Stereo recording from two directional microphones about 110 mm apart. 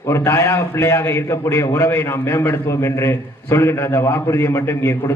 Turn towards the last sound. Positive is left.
turn(degrees=20)  # may be behind; listen again after turning